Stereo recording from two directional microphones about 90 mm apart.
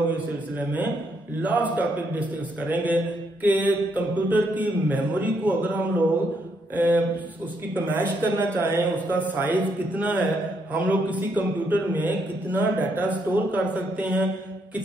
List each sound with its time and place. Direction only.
1.4 s music: 15° right (ahead or behind)
6.7 s a man's voice: 20° right (ahead or behind)
9.1 s music: 20° right (ahead or behind)
10.7 s a man's voice: 20° right (ahead or behind)
13.3 s music: 20° right (ahead or behind)